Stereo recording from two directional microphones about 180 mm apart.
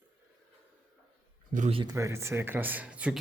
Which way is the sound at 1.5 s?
45° right (ahead or behind).